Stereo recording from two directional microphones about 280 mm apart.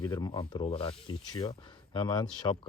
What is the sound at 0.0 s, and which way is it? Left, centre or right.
Speech, centre.